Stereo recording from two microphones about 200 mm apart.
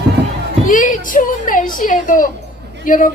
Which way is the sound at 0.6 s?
40° left (ahead or behind).